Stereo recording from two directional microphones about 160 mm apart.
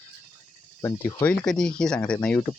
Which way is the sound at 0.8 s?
15° left (ahead or behind).